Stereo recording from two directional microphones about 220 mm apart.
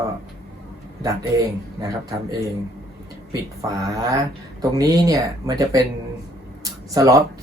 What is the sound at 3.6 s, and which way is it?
Speech, 15° right (ahead or behind).